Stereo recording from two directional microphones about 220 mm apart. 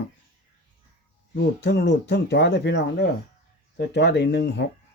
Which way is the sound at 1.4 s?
50° left (ahead or behind).